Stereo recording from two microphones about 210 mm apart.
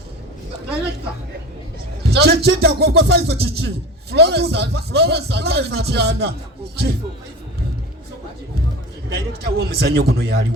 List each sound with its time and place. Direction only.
2.0 s speech: 50° right (ahead or behind)
9.1 s speech: 50° right (ahead or behind)